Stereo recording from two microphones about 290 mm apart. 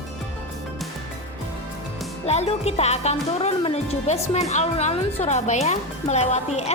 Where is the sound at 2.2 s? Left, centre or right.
Left.